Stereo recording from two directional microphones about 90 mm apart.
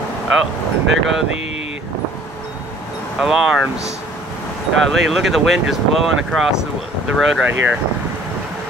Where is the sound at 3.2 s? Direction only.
5° right (ahead or behind).